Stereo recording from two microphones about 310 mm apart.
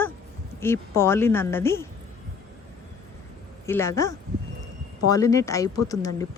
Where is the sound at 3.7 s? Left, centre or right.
Centre.